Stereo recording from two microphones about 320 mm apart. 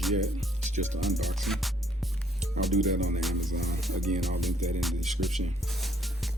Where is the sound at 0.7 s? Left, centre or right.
Right.